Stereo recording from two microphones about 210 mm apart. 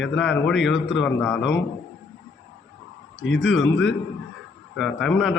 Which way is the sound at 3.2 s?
60° left (ahead or behind).